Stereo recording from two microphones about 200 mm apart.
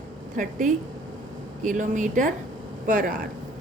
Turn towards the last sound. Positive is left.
turn(degrees=-40)  # may be behind; listen again after turning